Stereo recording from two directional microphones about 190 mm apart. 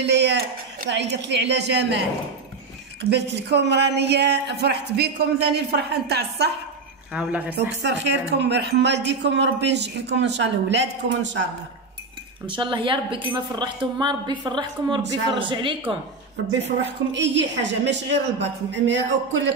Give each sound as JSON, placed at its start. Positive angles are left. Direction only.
{"t": 0.0, "sound": "speech", "side_deg": -65}
{"t": 3.3, "sound": "speech", "side_deg": -60}
{"t": 7.1, "sound": "speech", "side_deg": -5}
{"t": 7.7, "sound": "speech", "side_deg": -65}
{"t": 12.4, "sound": "speech", "side_deg": -25}
{"t": 16.6, "sound": "a woman's voice", "side_deg": -70}